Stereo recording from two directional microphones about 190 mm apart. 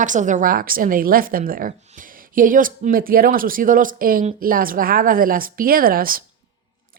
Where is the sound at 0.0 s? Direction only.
40° right (ahead or behind).